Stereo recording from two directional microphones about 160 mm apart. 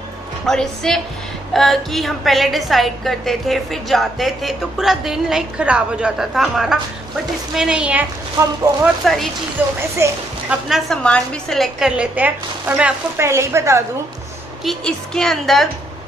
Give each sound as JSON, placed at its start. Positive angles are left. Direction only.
{"t": 0.5, "sound": "a woman's voice", "side_deg": 5}
{"t": 10.7, "sound": "a woman's voice", "side_deg": 5}
{"t": 14.6, "sound": "a woman's voice", "side_deg": 0}